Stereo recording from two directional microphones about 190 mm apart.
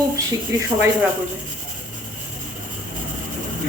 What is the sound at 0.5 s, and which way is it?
Speech, 15° right (ahead or behind).